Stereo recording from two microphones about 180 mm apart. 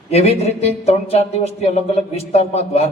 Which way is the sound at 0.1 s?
35° left (ahead or behind).